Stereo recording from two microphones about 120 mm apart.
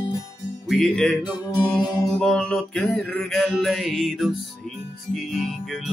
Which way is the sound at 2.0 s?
5° left (ahead or behind).